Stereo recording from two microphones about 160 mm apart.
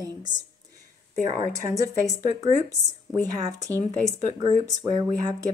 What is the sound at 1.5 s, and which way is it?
Speech, 20° right (ahead or behind).